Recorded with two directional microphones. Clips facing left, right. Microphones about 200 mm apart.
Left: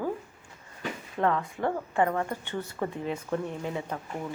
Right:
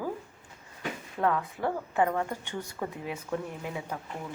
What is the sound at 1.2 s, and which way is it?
A woman's voice, 5° right (ahead or behind).